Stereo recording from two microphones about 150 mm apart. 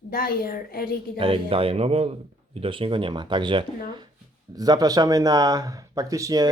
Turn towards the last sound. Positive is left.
turn(degrees=-25)  # may be behind; listen again after turning